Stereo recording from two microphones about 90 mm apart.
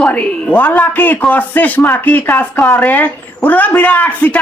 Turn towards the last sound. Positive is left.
turn(degrees=20)  # may be behind; listen again after turning